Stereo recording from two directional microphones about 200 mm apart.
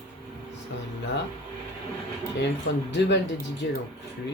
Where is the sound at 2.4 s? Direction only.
60° left (ahead or behind).